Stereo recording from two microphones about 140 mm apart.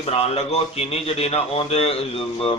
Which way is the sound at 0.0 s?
45° left (ahead or behind).